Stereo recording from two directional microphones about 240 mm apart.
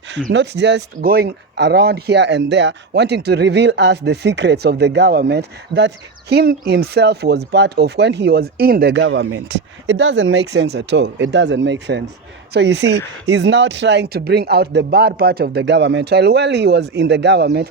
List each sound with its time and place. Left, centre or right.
0.3 s speech: right